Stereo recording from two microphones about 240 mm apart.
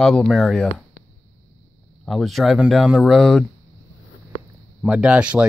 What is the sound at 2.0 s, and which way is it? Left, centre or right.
Speech, centre.